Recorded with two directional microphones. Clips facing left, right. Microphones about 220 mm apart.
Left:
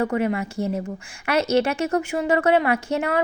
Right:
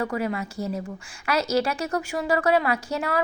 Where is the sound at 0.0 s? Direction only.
25° left (ahead or behind).